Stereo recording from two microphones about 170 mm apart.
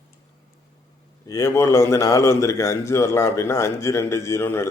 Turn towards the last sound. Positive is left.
turn(degrees=15)  # may be behind; listen again after turning